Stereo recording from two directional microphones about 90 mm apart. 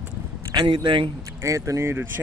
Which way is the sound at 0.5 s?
55° right (ahead or behind).